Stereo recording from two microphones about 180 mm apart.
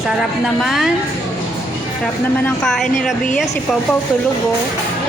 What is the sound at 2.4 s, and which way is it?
Speech, 5° left (ahead or behind).